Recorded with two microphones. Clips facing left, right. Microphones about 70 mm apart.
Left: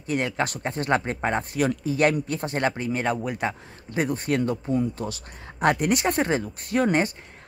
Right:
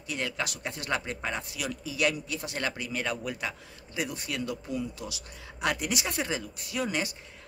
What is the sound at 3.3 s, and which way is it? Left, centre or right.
Speech, left.